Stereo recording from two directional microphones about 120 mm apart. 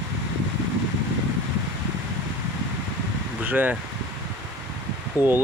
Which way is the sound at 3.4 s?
15° right (ahead or behind).